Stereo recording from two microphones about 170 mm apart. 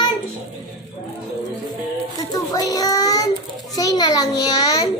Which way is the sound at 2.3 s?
20° left (ahead or behind).